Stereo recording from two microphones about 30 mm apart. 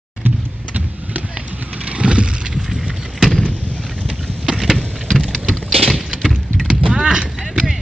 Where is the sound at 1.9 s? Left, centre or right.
Right.